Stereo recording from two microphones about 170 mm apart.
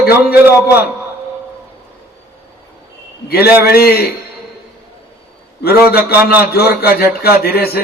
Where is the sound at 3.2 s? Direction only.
65° left (ahead or behind).